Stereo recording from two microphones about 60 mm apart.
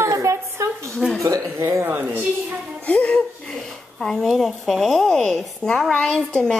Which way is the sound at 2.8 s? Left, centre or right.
Centre.